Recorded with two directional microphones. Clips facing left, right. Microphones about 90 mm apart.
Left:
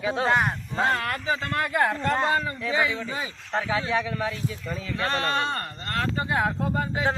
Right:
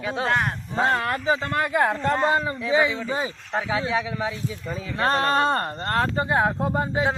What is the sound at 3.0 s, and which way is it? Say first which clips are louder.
Speech: right 5 dB; 30° right (ahead or behind).